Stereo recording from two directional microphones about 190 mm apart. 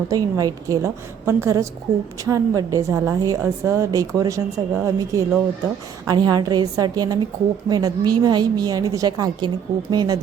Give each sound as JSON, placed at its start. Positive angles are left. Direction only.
{"t": 0.1, "sound": "a woman's voice", "side_deg": -20}
{"t": 1.9, "sound": "a woman's voice", "side_deg": -55}
{"t": 2.2, "sound": "a woman's voice", "side_deg": -15}